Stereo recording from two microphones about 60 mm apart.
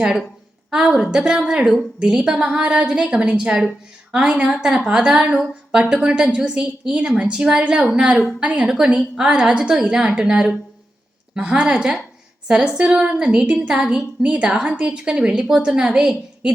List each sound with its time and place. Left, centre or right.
0.7 s a woman's voice: centre